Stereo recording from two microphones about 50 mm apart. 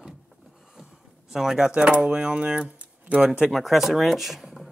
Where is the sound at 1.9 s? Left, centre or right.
Right.